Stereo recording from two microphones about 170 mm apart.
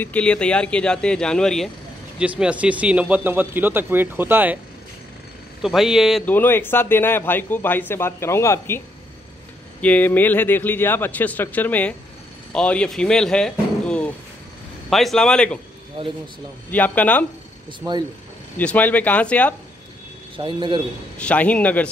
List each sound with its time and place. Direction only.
0.0 s speech: 5° left (ahead or behind); by 4.6 s 10° right (ahead or behind)
5.6 s speech: centre (ahead or behind)
6.2 s speech: 10° left (ahead or behind)
16.0 s speech: 30° right (ahead or behind)
16.7 s speech: 10° left (ahead or behind)
17.6 s a man's voice: 25° right (ahead or behind)
18.6 s speech: 10° left (ahead or behind)
20.3 s a man's voice: 30° right (ahead or behind)
21.2 s speech: 5° left (ahead or behind)